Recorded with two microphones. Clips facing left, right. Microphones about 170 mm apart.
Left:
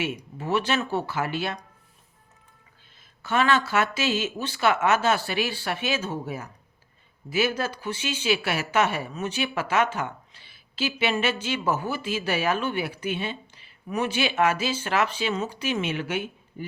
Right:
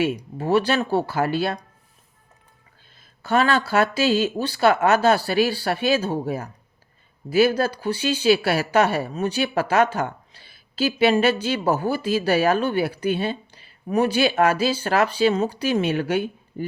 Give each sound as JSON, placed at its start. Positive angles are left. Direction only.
{"t": 0.0, "sound": "speech", "side_deg": -35}
{"t": 3.2, "sound": "speech", "side_deg": -35}